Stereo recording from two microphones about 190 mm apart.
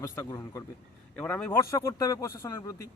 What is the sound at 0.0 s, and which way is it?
Speech, 15° left (ahead or behind).